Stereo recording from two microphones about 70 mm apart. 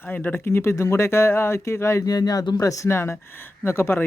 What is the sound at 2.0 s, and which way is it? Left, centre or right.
Speech, left.